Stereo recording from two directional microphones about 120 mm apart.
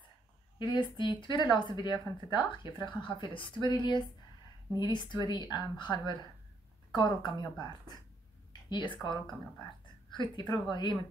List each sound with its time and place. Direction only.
0.6 s a woman's voice: 40° left (ahead or behind)
8.6 s a woman's voice: 40° left (ahead or behind)
10.1 s a woman's voice: 40° left (ahead or behind)